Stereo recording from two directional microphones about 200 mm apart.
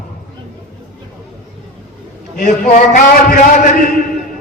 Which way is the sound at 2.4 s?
40° left (ahead or behind).